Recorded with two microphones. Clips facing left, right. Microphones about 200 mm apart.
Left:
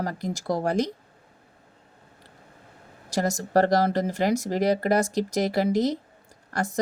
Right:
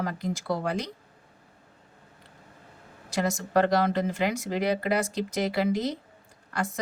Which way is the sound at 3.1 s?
40° left (ahead or behind).